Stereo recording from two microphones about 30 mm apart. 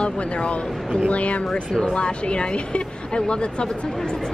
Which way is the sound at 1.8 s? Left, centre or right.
Left.